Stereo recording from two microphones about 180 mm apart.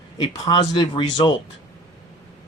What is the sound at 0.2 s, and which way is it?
Speech, 25° left (ahead or behind).